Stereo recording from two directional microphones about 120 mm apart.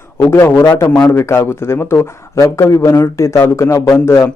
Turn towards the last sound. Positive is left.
turn(degrees=20)  # may be behind; listen again after turning